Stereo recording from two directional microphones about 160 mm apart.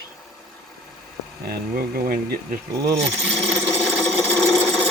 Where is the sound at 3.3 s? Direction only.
Centre (ahead or behind).